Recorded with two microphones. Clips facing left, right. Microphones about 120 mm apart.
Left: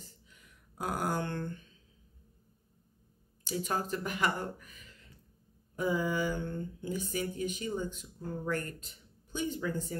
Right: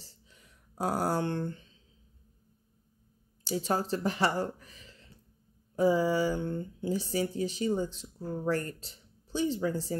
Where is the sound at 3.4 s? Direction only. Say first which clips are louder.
Right 4 dB; 30° right (ahead or behind).